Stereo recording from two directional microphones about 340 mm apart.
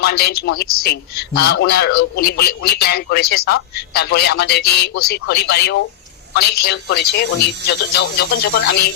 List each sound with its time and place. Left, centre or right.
0.0 s a man's voice: left